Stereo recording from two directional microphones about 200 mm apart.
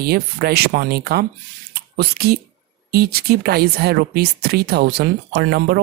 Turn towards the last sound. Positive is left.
turn(degrees=-55)  # may be behind; listen again after turning